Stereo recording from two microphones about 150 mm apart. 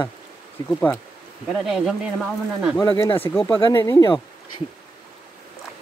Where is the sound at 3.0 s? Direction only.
15° left (ahead or behind); by 4.6 s 30° left (ahead or behind).